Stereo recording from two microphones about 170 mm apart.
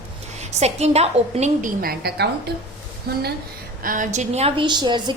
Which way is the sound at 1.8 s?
65° right (ahead or behind).